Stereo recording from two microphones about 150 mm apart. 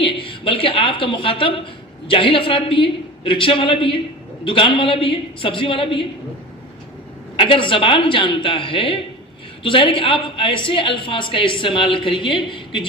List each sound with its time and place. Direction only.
0.0 s a woman's voice: 35° left (ahead or behind)
7.3 s a woman's voice: 35° left (ahead or behind)